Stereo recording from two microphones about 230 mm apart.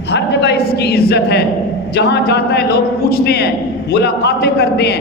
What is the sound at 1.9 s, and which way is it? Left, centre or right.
A woman's voice, left.